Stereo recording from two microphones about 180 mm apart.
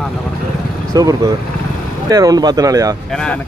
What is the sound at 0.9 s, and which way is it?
Speech, 20° right (ahead or behind).